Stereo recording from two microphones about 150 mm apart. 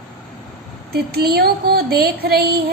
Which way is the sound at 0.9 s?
90° right.